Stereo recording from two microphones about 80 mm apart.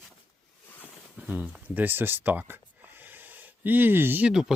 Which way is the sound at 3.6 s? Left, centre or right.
Right.